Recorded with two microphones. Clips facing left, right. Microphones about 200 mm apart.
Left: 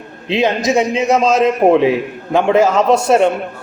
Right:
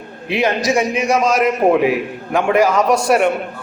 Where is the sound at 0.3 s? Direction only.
20° left (ahead or behind).